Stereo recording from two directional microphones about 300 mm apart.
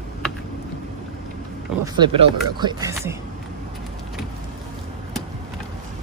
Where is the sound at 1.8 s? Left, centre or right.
Centre.